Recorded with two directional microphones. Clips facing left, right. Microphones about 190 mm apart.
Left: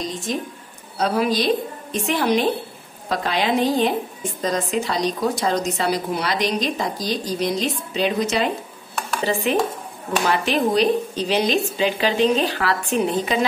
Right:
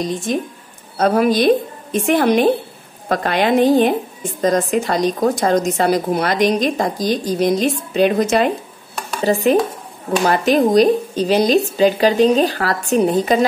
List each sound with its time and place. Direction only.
0.9 s a woman's voice: 50° right (ahead or behind)
9.2 s dishes: 40° right (ahead or behind)
10.2 s a woman's voice: 45° right (ahead or behind)